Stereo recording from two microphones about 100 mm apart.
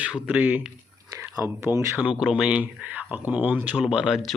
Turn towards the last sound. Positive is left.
turn(degrees=-5)  # may be behind; listen again after turning